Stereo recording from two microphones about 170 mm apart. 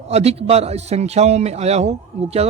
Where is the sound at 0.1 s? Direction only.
35° right (ahead or behind).